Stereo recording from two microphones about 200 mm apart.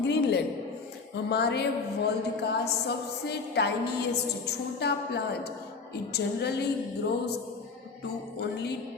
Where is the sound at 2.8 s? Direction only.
55° left (ahead or behind).